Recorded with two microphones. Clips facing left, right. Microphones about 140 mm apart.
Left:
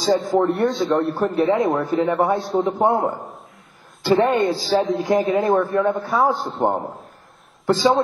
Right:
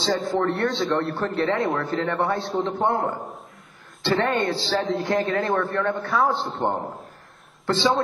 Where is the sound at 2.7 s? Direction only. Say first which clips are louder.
Left 5 dB; 20° left (ahead or behind).